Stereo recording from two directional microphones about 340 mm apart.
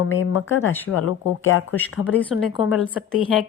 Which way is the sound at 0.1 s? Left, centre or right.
Left.